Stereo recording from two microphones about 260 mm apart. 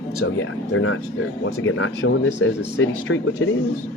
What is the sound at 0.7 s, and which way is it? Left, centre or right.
Speech, left.